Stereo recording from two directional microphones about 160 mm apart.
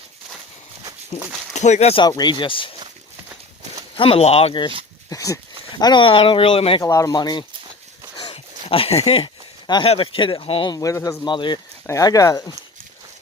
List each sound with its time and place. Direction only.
1.5 s speech: 45° left (ahead or behind)
2.0 s speech: 25° left (ahead or behind)
3.9 s speech: 35° left (ahead or behind)
5.0 s speech: 20° left (ahead or behind)
6.8 s speech: 20° left (ahead or behind)
8.1 s a sound: 30° left (ahead or behind)
9.9 s speech: 35° left (ahead or behind)